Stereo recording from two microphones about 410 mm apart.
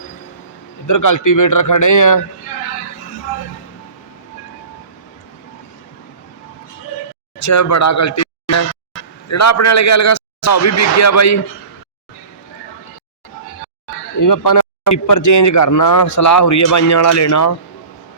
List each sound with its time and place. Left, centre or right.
0.9 s speech: left
7.4 s a man's voice: left
14.2 s speech: left